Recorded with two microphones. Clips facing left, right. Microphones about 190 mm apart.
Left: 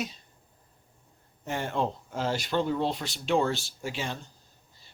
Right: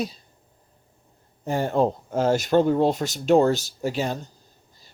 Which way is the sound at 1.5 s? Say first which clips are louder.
Right 8 dB; 40° right (ahead or behind).